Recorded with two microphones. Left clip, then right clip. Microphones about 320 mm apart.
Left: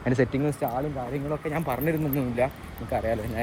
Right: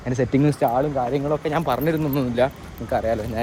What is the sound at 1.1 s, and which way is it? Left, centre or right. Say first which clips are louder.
Speech: right 8 dB; centre.